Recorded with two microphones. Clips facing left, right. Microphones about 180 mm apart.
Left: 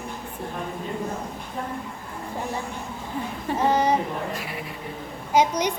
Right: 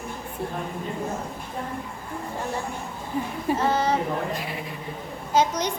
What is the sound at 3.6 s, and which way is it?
Speech, 15° left (ahead or behind).